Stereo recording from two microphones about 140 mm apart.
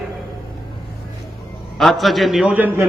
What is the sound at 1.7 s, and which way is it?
A man's voice, centre (ahead or behind).